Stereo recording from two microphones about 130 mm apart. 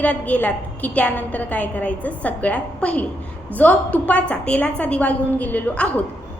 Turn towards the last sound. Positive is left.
turn(degrees=10)  # may be behind; listen again after turning